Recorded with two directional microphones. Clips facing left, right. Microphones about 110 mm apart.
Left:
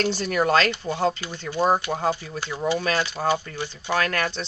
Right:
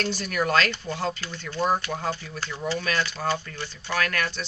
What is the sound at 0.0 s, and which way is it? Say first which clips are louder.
Speech: left 4 dB; 30° left (ahead or behind).